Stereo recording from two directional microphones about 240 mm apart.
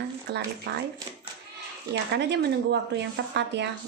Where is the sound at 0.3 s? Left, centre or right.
Right.